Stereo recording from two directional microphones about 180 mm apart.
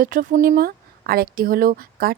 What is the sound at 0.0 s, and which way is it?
Speech, 50° right (ahead or behind).